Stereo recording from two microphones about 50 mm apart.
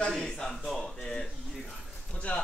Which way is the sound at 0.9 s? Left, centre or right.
Centre.